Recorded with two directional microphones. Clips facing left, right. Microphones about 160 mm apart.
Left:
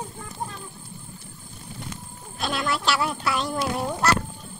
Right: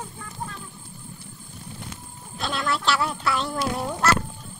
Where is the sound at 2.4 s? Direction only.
5° left (ahead or behind).